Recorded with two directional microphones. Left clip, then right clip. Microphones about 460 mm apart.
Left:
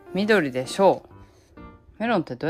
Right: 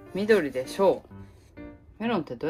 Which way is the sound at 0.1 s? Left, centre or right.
Centre.